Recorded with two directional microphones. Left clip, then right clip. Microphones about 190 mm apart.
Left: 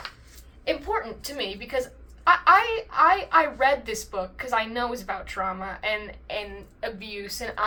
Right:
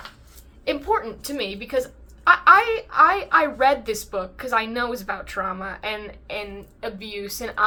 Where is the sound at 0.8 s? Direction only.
10° right (ahead or behind).